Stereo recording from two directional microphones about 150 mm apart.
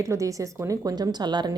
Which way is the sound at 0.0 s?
20° right (ahead or behind).